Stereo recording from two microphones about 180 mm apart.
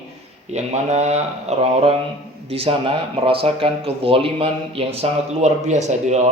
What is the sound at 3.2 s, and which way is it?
Speech, 30° right (ahead or behind).